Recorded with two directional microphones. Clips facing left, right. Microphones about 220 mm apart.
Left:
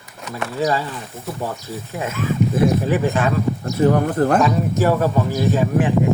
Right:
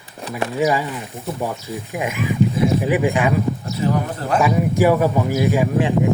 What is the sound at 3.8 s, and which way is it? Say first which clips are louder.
Speech: left 8 dB; 50° left (ahead or behind).